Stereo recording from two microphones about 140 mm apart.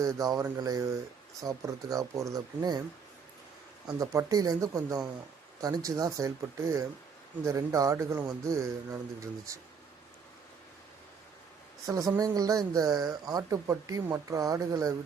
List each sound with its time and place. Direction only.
0.0 s speech: 25° right (ahead or behind)
3.8 s speech: 25° right (ahead or behind)
11.9 s speech: 25° right (ahead or behind)